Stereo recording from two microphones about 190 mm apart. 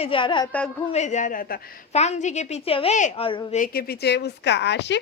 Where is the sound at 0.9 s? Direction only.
40° left (ahead or behind).